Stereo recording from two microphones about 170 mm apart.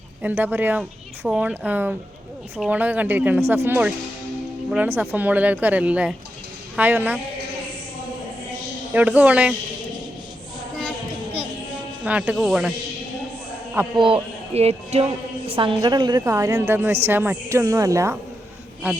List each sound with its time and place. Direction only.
0.2 s speech: 10° right (ahead or behind)
8.9 s speech: 10° right (ahead or behind)
12.0 s speech: 5° right (ahead or behind)
13.9 s a woman's voice: 30° right (ahead or behind)